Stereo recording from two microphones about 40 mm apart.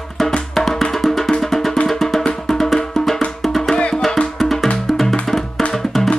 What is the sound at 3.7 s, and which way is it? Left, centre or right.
Music, left.